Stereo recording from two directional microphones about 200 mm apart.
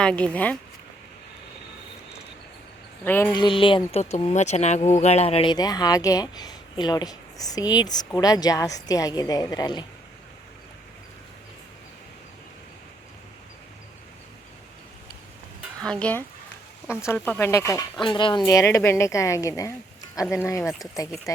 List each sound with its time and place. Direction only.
0.0 s speech: 5° left (ahead or behind)
3.0 s speech: 10° left (ahead or behind)
3.3 s speech: 25° left (ahead or behind)
15.8 s stir: 5° left (ahead or behind)
16.9 s speech: 10° left (ahead or behind)